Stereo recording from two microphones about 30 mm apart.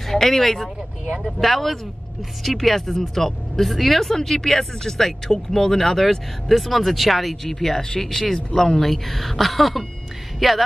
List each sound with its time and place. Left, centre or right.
0.0 s speech: centre
4.1 s speech: centre
7.4 s speech: centre